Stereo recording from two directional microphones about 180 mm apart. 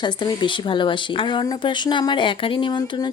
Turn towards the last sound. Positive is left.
turn(degrees=25)  # may be behind; listen again after turning